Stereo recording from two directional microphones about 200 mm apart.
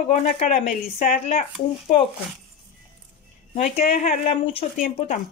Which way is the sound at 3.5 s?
35° left (ahead or behind).